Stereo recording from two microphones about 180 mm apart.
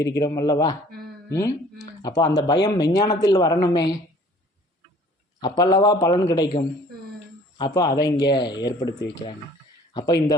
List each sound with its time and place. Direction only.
0.2 s speech: 20° left (ahead or behind)
5.4 s speech: 25° left (ahead or behind)